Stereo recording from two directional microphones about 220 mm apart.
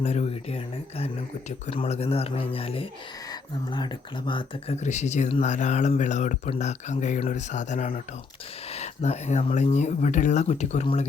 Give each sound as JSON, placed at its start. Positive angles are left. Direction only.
{"t": 0.0, "sound": "speech", "side_deg": 30}